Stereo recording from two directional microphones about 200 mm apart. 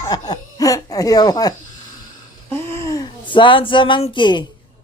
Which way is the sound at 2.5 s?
10° left (ahead or behind).